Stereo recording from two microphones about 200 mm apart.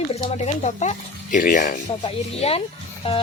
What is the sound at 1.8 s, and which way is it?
Speech, 25° left (ahead or behind).